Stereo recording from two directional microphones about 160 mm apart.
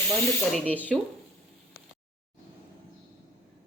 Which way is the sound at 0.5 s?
10° left (ahead or behind).